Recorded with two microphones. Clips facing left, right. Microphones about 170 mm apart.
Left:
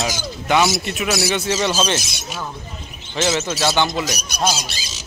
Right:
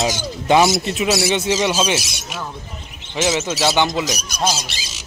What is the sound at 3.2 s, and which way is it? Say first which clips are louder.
Speech: right 1 dB; 10° right (ahead or behind).